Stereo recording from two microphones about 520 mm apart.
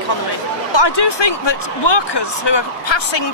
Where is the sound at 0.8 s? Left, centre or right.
Left.